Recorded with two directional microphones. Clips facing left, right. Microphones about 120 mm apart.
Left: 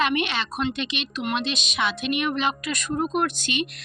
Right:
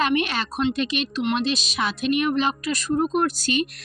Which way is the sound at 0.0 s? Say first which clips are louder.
Right 2 dB; 35° right (ahead or behind).